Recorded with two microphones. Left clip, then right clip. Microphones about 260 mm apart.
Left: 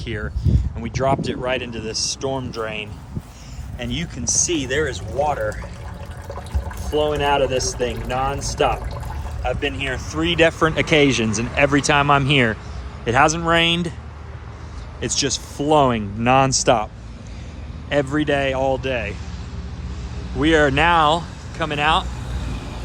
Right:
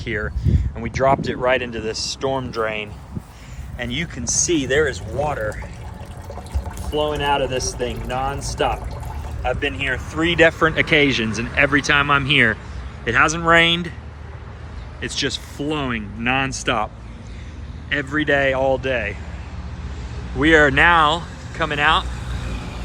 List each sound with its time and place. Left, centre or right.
0.0 s speech: centre
6.9 s speech: centre
15.0 s speech: centre
20.4 s speech: centre